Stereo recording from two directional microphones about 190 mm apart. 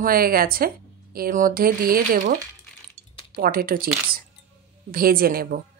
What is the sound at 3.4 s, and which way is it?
Speech, 50° right (ahead or behind).